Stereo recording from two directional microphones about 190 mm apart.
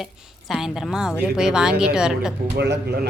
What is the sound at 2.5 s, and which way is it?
Speech, 60° right (ahead or behind).